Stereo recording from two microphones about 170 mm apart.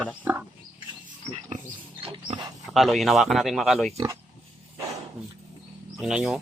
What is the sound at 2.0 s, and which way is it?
Pig, 30° right (ahead or behind).